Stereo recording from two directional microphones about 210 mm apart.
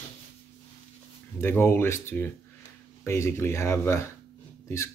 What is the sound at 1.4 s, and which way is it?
Speech, 10° left (ahead or behind).